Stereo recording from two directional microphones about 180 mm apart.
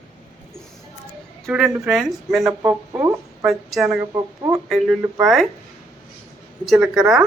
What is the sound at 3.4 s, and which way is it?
Speech, 5° right (ahead or behind).